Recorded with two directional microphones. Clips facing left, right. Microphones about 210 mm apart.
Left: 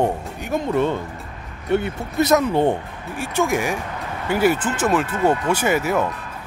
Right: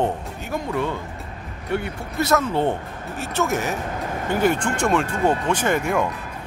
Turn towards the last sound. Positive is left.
turn(degrees=5)  # may be behind; listen again after turning